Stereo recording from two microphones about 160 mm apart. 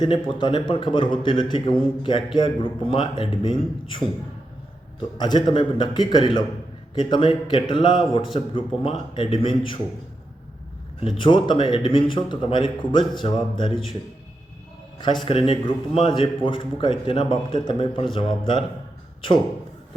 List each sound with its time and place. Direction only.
0.0 s a man's voice: 30° left (ahead or behind)
5.1 s a man's voice: 25° left (ahead or behind)
11.2 s a man's voice: 30° left (ahead or behind)
14.9 s a man's voice: 30° left (ahead or behind)